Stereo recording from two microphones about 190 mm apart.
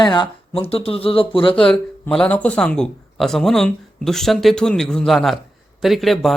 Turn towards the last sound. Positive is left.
turn(degrees=0)  # may be behind; listen again after turning